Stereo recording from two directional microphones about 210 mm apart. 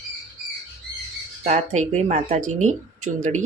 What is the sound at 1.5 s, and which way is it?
Speech, 35° right (ahead or behind).